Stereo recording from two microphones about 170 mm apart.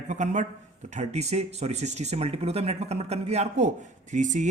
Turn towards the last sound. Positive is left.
turn(degrees=-45)  # may be behind; listen again after turning